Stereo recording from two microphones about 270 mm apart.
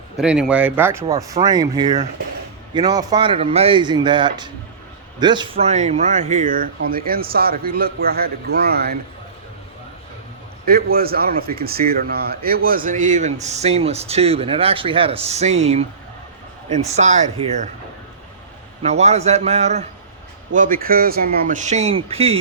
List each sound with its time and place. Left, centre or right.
0.2 s speech: centre
1.0 s a man's voice: right
10.9 s a man's voice: right
18.8 s speech: right